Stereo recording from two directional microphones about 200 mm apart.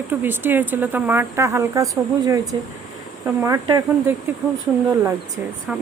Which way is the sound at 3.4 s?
15° right (ahead or behind).